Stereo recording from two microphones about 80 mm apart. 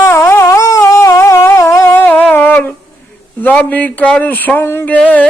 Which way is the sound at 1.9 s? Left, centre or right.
Left.